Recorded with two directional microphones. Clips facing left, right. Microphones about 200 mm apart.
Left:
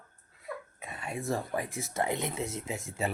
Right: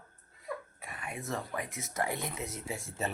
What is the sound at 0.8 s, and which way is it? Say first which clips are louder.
Speech: left 5 dB; 25° left (ahead or behind).